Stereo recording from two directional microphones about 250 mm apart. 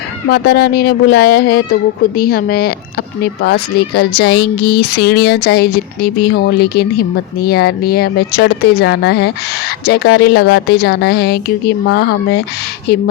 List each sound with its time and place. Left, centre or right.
0.3 s speech: left